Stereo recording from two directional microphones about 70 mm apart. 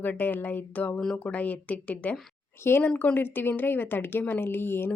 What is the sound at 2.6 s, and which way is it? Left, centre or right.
Speech, left.